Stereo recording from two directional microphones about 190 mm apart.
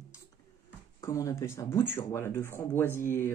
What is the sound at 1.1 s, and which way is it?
Speech, 15° left (ahead or behind).